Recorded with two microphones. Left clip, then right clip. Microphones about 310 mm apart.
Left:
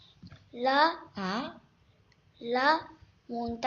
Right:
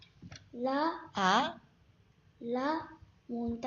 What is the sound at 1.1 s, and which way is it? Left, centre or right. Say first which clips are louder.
Speech: right 7 dB; right.